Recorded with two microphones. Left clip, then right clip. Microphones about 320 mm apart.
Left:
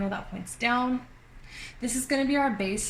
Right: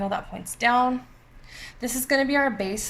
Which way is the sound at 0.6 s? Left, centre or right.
Right.